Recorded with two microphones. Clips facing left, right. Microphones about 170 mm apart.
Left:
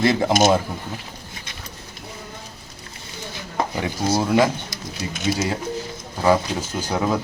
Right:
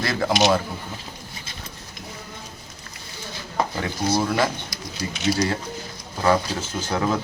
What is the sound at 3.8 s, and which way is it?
Speech, 15° left (ahead or behind).